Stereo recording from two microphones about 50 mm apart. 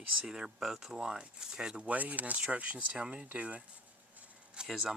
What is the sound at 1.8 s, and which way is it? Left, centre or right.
Speech, right.